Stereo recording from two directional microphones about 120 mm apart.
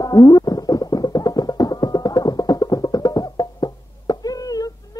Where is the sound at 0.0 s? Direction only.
30° left (ahead or behind).